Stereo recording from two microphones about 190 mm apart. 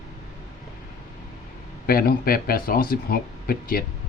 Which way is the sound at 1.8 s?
50° left (ahead or behind).